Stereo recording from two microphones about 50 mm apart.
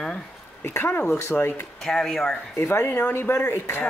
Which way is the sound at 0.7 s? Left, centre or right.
Left.